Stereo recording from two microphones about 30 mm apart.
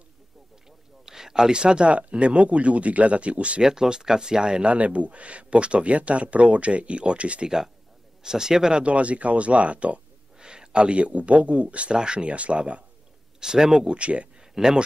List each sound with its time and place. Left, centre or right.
1.0 s a sound: centre
1.5 s speech: right
1.9 s speech: right
3.6 s speech: right
4.7 s speech: right
7.4 s speech: centre
8.8 s speech: right
10.4 s speech: right
11.9 s speech: right
12.3 s speech: right
13.4 s speech: centre
13.8 s speech: right
14.5 s speech: centre